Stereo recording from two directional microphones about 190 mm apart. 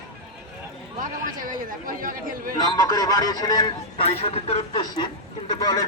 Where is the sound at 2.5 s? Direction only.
20° left (ahead or behind).